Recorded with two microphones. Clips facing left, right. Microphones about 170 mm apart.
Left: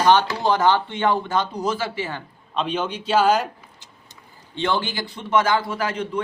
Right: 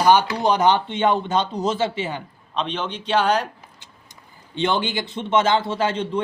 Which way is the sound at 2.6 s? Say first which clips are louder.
Left 2 dB; 10° left (ahead or behind).